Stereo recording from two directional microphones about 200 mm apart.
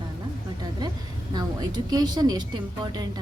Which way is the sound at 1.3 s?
20° right (ahead or behind).